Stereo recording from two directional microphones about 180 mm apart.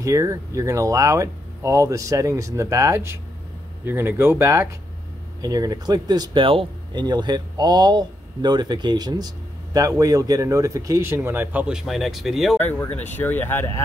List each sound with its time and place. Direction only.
0.0 s speech: 20° right (ahead or behind); by 12.5 s centre (ahead or behind)
12.5 s speech: 10° left (ahead or behind)